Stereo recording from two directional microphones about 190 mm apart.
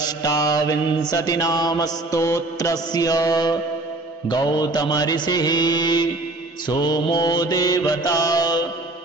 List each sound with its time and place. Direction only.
0.0 s mantra: 20° left (ahead or behind)